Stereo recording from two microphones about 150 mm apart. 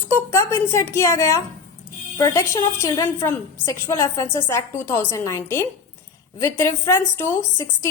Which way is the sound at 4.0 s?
20° left (ahead or behind).